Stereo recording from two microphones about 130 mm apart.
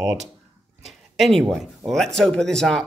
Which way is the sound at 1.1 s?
Centre (ahead or behind).